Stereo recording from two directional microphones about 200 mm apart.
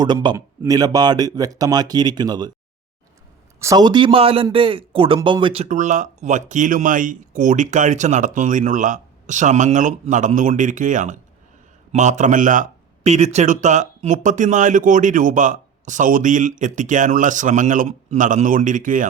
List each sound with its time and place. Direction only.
0.0 s speech: 20° right (ahead or behind)
3.6 s speech: 15° right (ahead or behind)
5.6 s speech: 40° right (ahead or behind)